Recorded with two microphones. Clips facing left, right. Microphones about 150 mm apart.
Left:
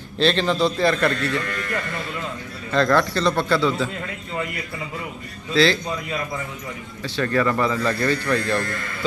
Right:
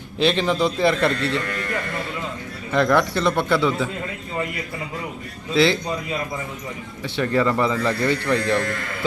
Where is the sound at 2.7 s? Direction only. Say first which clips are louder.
Even; 15° right (ahead or behind).